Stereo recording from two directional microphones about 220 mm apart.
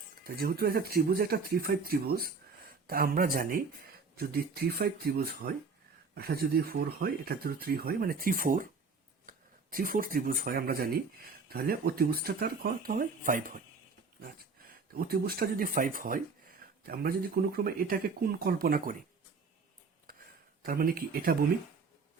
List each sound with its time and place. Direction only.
0.3 s speech: 45° right (ahead or behind)
14.9 s speech: 45° right (ahead or behind)
20.7 s speech: 40° right (ahead or behind)